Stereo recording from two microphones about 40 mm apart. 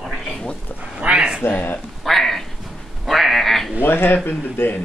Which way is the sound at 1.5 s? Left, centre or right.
Left.